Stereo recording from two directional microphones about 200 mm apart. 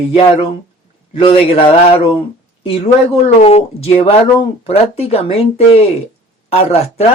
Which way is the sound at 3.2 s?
30° left (ahead or behind).